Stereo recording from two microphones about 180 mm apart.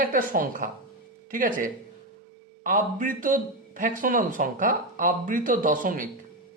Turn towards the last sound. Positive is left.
turn(degrees=-50)  # may be behind; listen again after turning